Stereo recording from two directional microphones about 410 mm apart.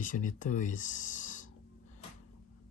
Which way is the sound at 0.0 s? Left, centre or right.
Centre.